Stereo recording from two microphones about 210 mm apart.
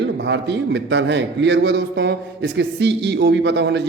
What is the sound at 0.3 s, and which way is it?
A man's voice, 55° right (ahead or behind).